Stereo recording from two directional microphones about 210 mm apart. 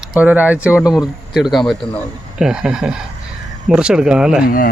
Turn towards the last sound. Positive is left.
turn(degrees=40)  # may be behind; listen again after turning